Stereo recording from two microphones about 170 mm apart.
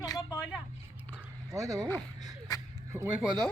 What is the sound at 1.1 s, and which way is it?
Dog, 15° right (ahead or behind).